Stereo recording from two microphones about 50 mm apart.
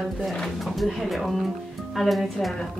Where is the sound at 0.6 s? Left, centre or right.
Centre.